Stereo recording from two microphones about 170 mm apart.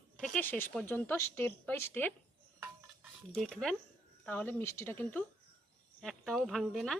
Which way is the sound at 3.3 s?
5° left (ahead or behind).